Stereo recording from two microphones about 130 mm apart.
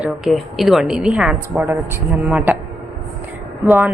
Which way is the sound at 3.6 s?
15° right (ahead or behind).